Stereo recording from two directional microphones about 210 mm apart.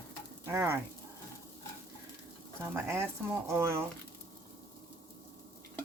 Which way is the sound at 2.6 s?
10° right (ahead or behind).